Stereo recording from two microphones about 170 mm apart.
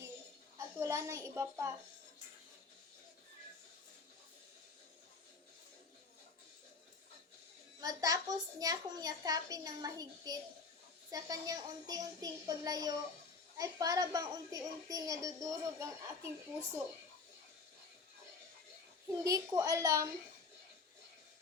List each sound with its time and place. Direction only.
0.8 s a child's voice: 15° right (ahead or behind)
7.8 s speech: 20° right (ahead or behind)
19.0 s speech: 20° right (ahead or behind)